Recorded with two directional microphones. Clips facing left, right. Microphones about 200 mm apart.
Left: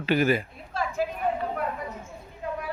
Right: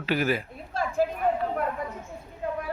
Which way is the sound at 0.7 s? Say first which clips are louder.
Right 2 dB; 50° right (ahead or behind).